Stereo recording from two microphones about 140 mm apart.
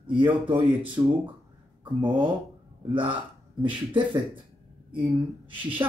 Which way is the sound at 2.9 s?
35° right (ahead or behind).